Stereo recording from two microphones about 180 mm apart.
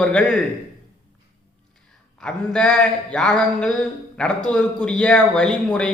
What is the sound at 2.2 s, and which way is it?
A man's voice, 5° left (ahead or behind).